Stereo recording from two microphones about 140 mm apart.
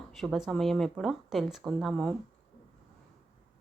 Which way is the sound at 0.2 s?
Centre (ahead or behind).